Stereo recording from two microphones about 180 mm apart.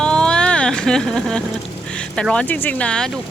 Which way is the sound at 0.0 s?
5° left (ahead or behind).